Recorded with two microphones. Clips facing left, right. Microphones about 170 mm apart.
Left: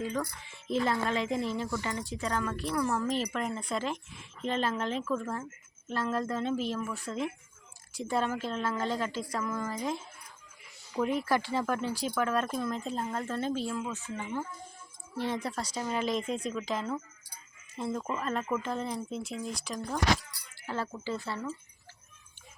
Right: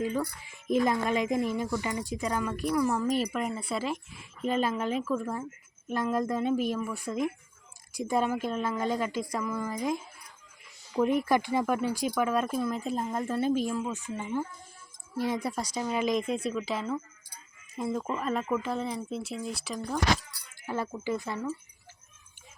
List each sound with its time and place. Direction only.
0.0 s speech: 10° right (ahead or behind)
20.6 s speech: 15° right (ahead or behind)